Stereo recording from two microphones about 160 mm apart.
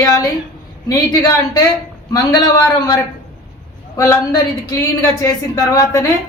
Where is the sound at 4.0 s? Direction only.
20° left (ahead or behind).